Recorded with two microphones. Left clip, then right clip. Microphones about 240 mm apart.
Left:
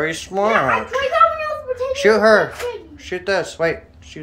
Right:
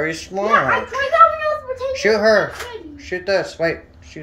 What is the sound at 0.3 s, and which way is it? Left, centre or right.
Speech, centre.